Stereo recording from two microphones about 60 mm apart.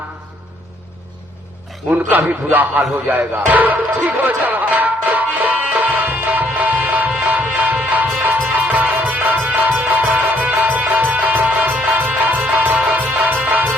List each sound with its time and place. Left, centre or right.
2.0 s a man's voice: right
3.1 s music: right